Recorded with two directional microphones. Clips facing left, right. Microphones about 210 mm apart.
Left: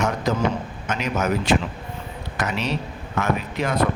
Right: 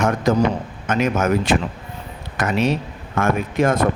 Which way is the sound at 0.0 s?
50° right (ahead or behind).